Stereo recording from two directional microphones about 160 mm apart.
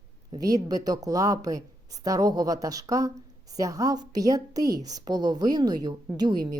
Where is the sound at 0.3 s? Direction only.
25° right (ahead or behind).